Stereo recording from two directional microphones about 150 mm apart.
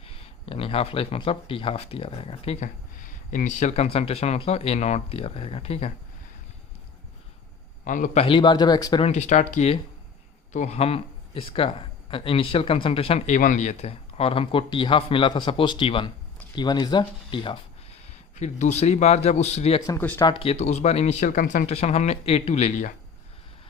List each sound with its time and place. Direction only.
0.0 s speech: 40° left (ahead or behind)
3.3 s speech: 55° left (ahead or behind)
7.9 s a man's voice: 60° left (ahead or behind)
8.2 s speech: 35° left (ahead or behind)
9.0 s speech: 50° left (ahead or behind); by 17.6 s 35° left (ahead or behind)
18.3 s speech: 50° left (ahead or behind)
19.9 s speech: 15° left (ahead or behind)
20.2 s speech: 35° left (ahead or behind); by 21.8 s 60° left (ahead or behind)
21.8 s speech: 45° left (ahead or behind)